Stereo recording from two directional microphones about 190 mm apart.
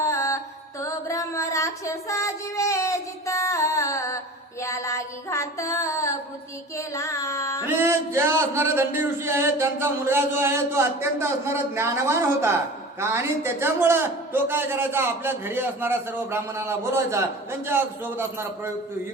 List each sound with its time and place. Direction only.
0.0 s music: 15° left (ahead or behind)
4.6 s child singing: 15° left (ahead or behind)
6.7 s carnatic music: 15° left (ahead or behind)
7.6 s music: 10° right (ahead or behind)